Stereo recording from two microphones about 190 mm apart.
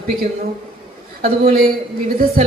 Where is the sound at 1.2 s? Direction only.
50° right (ahead or behind).